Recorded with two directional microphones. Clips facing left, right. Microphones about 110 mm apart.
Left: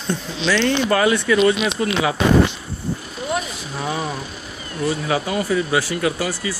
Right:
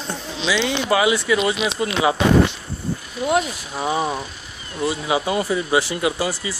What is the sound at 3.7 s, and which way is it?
Speech, 20° right (ahead or behind).